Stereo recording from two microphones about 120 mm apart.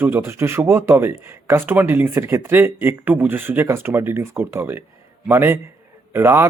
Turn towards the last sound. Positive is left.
turn(degrees=-20)  # may be behind; listen again after turning